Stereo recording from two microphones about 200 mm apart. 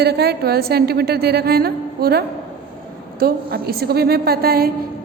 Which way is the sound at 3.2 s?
50° right (ahead or behind).